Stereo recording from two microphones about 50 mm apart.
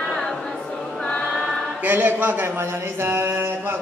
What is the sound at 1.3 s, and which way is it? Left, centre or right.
Choir, centre.